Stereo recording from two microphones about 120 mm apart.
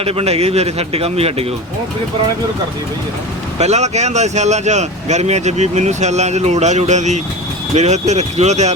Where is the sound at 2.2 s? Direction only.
45° right (ahead or behind).